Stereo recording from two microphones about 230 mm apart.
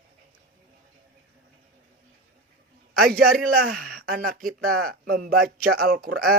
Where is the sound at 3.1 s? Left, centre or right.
Right.